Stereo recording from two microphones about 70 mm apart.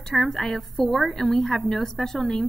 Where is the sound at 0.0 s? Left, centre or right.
Centre.